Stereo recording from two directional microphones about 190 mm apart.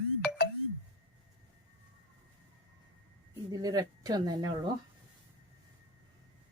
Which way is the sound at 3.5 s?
20° right (ahead or behind).